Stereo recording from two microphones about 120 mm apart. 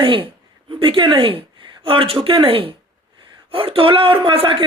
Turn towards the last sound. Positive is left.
turn(degrees=-45)  # may be behind; listen again after turning